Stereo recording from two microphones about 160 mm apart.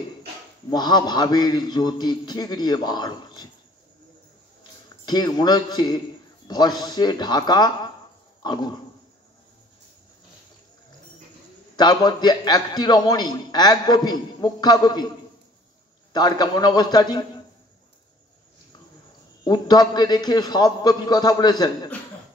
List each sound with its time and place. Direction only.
0.7 s a man's voice: 25° left (ahead or behind)
5.0 s a man's voice: 25° left (ahead or behind)
8.4 s dog: 25° left (ahead or behind)
11.7 s a man's voice: 25° left (ahead or behind)
16.1 s a man's voice: 25° left (ahead or behind)
19.4 s a man's voice: 25° left (ahead or behind)